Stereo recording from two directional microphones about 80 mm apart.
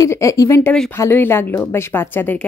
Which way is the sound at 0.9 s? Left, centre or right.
Left.